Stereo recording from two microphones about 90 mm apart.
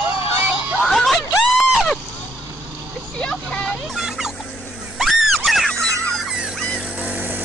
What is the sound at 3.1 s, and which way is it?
Vehicle, 10° left (ahead or behind).